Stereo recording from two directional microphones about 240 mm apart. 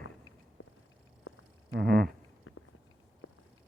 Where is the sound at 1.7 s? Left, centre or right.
Right.